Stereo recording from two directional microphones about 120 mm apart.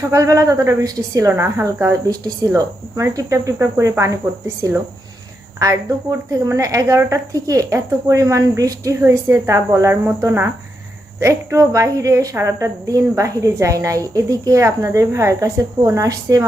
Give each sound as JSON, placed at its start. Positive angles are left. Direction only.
{"t": 0.1, "sound": "a woman's voice", "side_deg": -25}